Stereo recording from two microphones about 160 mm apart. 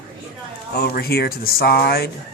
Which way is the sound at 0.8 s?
75° left (ahead or behind).